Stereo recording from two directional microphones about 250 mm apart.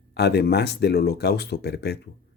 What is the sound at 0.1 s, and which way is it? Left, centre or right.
Speech, left.